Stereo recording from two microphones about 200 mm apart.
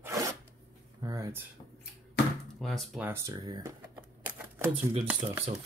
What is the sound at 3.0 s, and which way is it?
Speech, 15° right (ahead or behind).